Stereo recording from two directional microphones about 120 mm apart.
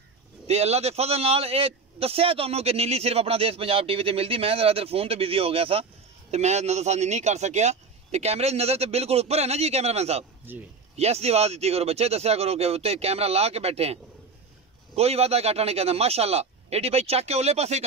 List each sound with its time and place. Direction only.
0.5 s a man's voice: 60° right (ahead or behind)
6.3 s a man's voice: 65° right (ahead or behind)
10.5 s speech: 15° right (ahead or behind)
11.0 s a man's voice: 60° right (ahead or behind)
15.0 s a man's voice: 60° right (ahead or behind)